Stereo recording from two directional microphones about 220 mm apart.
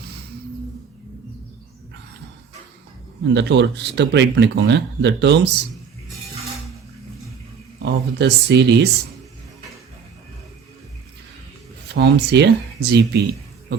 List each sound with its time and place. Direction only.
3.3 s speech: 55° right (ahead or behind)
7.8 s speech: 50° right (ahead or behind)
11.9 s speech: 50° right (ahead or behind)